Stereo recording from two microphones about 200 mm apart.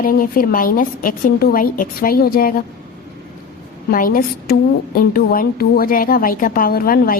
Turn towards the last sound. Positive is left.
turn(degrees=45)  # may be behind; listen again after turning